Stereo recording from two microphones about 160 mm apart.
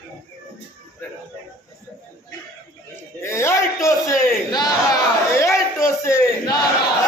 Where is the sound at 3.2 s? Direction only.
15° left (ahead or behind).